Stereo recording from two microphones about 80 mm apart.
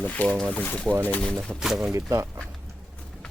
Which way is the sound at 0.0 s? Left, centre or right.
Centre.